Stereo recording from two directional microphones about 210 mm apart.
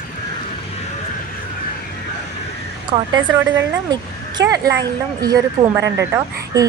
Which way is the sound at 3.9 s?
20° right (ahead or behind).